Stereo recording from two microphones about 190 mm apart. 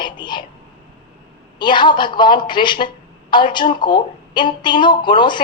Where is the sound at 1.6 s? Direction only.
25° left (ahead or behind).